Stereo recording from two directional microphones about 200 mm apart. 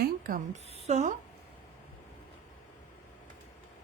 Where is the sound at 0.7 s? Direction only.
35° right (ahead or behind).